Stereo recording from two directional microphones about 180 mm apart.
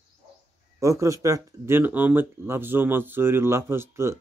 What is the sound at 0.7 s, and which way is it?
Speech, 15° right (ahead or behind).